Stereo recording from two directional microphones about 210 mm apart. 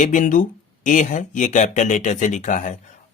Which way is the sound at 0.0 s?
40° left (ahead or behind).